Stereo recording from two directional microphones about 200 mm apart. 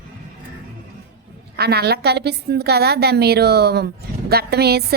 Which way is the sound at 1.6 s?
55° right (ahead or behind).